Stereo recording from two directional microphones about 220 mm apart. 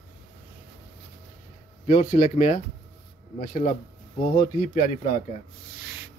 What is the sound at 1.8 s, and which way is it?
Speech, 35° left (ahead or behind).